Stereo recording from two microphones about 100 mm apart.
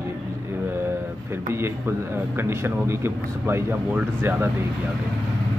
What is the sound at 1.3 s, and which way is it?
Speech, 25° right (ahead or behind).